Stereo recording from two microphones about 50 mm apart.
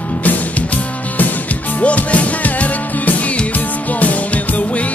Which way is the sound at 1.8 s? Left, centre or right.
Left.